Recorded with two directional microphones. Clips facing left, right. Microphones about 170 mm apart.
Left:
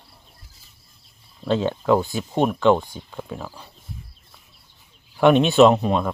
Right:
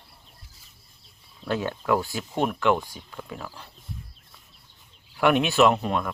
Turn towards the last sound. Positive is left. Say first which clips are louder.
# left 6 dB
turn(degrees=25)  # may be behind; listen again after turning